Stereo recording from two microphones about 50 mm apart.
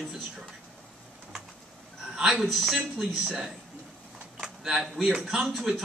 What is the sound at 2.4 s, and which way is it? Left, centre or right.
A man's voice, centre.